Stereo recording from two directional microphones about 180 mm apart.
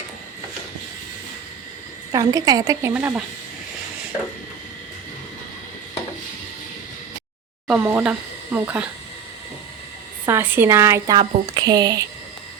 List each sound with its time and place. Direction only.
2.1 s speech: 20° right (ahead or behind)
7.7 s speech: 10° right (ahead or behind)
10.2 s speech: 10° right (ahead or behind)